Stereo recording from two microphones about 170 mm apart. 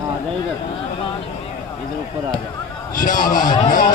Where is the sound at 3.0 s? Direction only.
50° left (ahead or behind).